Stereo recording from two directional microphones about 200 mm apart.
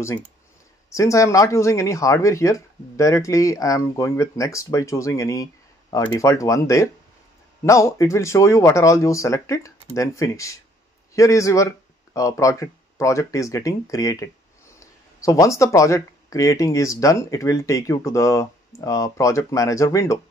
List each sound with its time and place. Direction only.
0.8 s speech: 15° left (ahead or behind)